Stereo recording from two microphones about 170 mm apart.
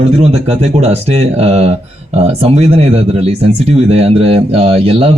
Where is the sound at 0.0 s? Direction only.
35° right (ahead or behind).